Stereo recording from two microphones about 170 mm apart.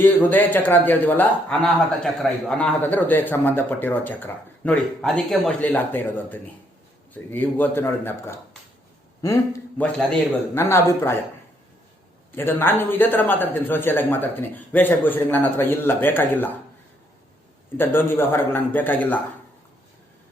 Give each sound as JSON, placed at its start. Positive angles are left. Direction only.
{"t": 0.0, "sound": "a man's voice", "side_deg": 10}
{"t": 12.4, "sound": "a man's voice", "side_deg": 10}
{"t": 17.7, "sound": "a man's voice", "side_deg": 15}